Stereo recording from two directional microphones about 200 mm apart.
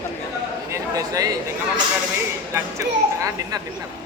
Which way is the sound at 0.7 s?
15° right (ahead or behind).